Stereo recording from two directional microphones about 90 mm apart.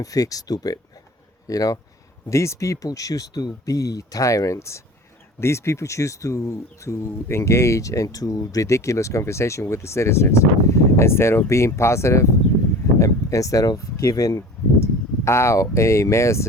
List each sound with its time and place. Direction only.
0.0 s speech: 40° left (ahead or behind)